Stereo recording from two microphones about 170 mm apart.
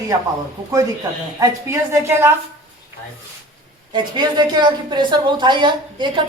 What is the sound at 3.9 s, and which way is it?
A woman's voice, 25° right (ahead or behind).